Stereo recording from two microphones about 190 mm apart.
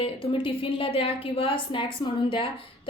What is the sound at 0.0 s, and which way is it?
A woman's voice, 30° left (ahead or behind).